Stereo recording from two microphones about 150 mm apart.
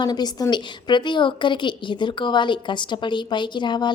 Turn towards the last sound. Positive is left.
turn(degrees=30)  # may be behind; listen again after turning